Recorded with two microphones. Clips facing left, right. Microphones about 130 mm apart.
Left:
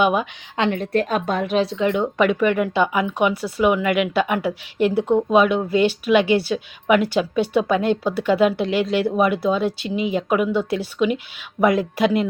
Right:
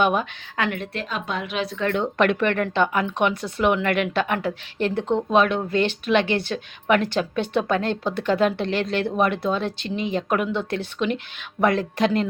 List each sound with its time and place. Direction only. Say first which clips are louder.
0.0 s speech: left 2 dB; 10° left (ahead or behind)
0.5 s a woman's voice: left 4 dB; 25° left (ahead or behind)
0.8 s a woman's voice: left 9 dB; 45° left (ahead or behind)
1.6 s speech: left 3 dB; 15° left (ahead or behind)